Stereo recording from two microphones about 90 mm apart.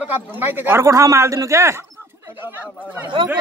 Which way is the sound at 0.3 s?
20° right (ahead or behind).